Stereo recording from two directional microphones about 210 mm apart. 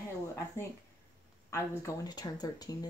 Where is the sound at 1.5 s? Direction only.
15° left (ahead or behind).